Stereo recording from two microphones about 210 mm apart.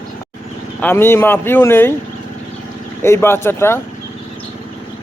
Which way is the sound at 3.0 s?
10° left (ahead or behind).